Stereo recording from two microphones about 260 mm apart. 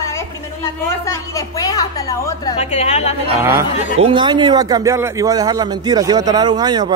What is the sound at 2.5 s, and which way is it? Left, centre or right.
Speech, left.